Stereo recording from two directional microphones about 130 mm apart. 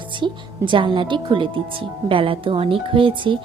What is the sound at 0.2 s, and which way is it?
Speech, 40° right (ahead or behind).